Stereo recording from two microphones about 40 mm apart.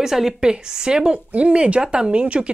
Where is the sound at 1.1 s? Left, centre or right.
Right.